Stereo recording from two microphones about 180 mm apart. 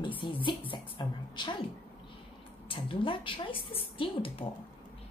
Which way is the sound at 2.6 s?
30° left (ahead or behind).